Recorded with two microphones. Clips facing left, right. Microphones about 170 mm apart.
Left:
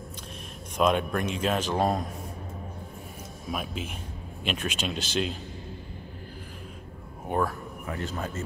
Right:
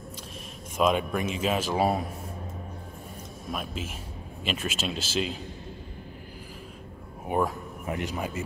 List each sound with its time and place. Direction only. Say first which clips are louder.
0.7 s a man's voice: even; 5° right (ahead or behind)
3.5 s a man's voice: left 1 dB; centre (ahead or behind)
7.2 s speech: right 1 dB; 15° right (ahead or behind)